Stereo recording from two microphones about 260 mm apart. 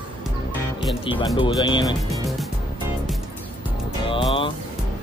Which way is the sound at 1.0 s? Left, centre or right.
Centre.